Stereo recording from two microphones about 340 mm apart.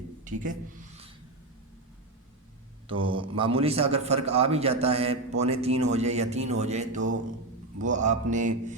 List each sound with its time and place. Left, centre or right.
0.3 s speech: right
2.9 s a man's voice: centre